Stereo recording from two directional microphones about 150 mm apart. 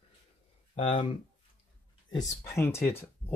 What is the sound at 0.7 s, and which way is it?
Speech, 40° left (ahead or behind).